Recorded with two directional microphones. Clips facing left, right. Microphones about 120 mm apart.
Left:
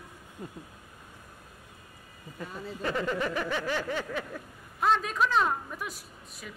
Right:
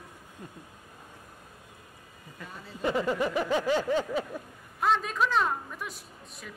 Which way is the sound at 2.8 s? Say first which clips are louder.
Right 3 dB; 15° right (ahead or behind).